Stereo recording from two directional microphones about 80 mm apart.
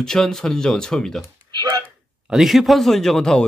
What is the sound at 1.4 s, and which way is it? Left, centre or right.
Hiccup, right.